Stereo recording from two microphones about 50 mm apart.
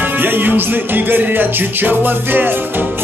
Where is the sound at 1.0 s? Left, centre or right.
Right.